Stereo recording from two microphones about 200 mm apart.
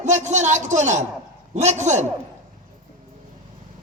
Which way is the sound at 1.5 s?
35° right (ahead or behind).